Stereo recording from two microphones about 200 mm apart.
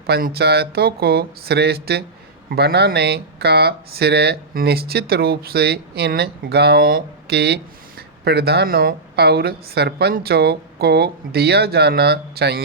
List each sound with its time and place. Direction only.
0.1 s speech: 55° right (ahead or behind)